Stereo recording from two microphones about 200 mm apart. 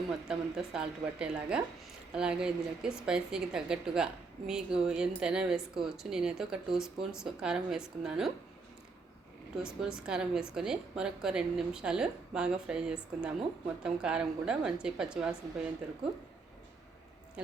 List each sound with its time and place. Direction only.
0.1 s a woman's voice: 5° right (ahead or behind)
9.6 s a woman's voice: 5° right (ahead or behind)
17.4 s a sound: 5° right (ahead or behind)